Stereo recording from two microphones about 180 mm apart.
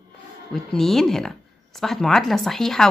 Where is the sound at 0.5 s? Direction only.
Centre (ahead or behind).